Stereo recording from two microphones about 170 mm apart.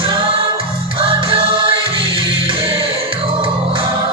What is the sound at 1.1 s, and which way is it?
Music, 30° right (ahead or behind).